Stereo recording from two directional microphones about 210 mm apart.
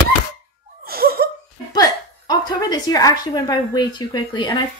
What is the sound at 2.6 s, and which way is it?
A woman's voice, 15° left (ahead or behind).